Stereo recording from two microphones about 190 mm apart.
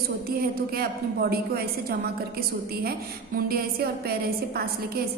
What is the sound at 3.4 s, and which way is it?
A woman's voice, 55° right (ahead or behind).